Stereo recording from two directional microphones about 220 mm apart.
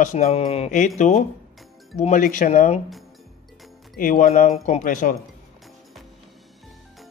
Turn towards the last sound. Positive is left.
turn(degrees=40)  # may be behind; listen again after turning